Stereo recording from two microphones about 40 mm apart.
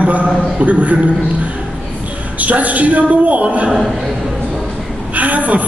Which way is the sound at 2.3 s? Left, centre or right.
Right.